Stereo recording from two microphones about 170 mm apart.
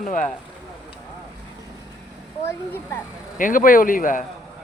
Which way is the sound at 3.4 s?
50° left (ahead or behind).